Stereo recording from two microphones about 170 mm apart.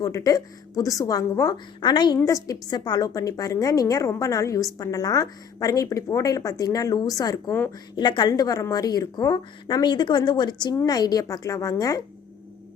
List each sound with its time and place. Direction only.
0.0 s a woman's voice: 20° left (ahead or behind)